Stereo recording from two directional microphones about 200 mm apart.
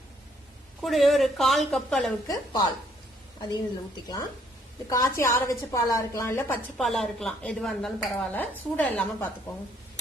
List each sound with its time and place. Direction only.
0.8 s a woman's voice: centre (ahead or behind)
2.2 s a woman's voice: 20° left (ahead or behind)
4.9 s a woman's voice: 15° left (ahead or behind)
6.7 s a woman's voice: centre (ahead or behind)